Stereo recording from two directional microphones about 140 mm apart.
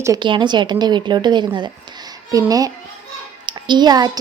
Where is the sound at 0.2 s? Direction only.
35° right (ahead or behind).